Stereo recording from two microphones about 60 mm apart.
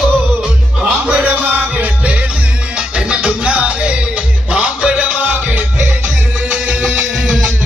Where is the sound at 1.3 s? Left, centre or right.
Right.